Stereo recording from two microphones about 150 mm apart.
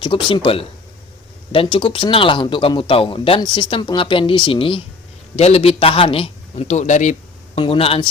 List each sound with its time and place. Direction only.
0.0 s a man's voice: 30° left (ahead or behind); by 7.6 s 50° left (ahead or behind)
7.6 s speech: 40° left (ahead or behind)